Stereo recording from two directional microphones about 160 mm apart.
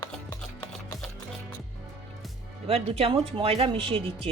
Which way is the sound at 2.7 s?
40° right (ahead or behind).